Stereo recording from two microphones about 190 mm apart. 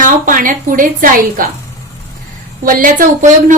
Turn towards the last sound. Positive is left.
turn(degrees=-45)  # may be behind; listen again after turning